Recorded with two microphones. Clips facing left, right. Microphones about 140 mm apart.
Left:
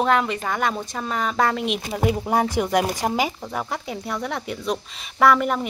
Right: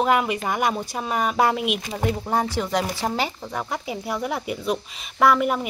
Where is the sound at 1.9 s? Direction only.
10° left (ahead or behind).